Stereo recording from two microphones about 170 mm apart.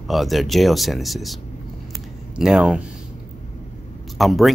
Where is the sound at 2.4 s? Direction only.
5° right (ahead or behind).